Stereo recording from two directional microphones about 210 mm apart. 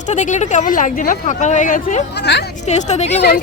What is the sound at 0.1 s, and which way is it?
Speech, 35° left (ahead or behind).